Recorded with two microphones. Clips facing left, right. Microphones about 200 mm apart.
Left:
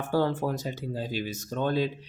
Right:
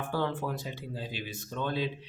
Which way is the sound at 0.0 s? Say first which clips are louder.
Left 6 dB; 40° left (ahead or behind).